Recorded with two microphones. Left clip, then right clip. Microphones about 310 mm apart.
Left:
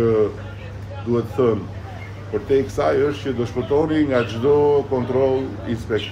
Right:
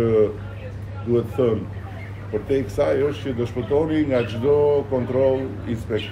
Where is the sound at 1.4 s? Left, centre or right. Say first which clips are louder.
Left 2 dB; centre.